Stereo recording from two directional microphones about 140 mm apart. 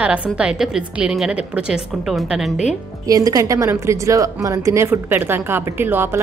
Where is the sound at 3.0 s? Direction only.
25° right (ahead or behind).